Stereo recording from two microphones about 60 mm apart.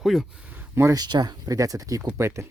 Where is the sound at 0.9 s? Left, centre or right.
Right.